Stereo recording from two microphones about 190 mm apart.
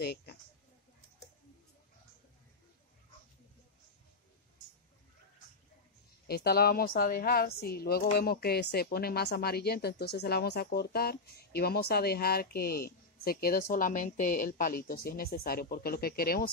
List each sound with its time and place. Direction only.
0.0 s speech: 60° left (ahead or behind)
6.2 s a woman's voice: 55° left (ahead or behind)